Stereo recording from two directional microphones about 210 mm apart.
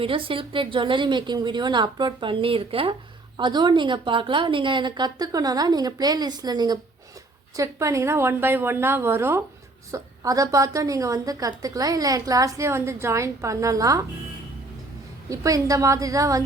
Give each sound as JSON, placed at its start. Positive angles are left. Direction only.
{"t": 0.0, "sound": "a woman's voice", "side_deg": -25}
{"t": 15.3, "sound": "a woman's voice", "side_deg": -15}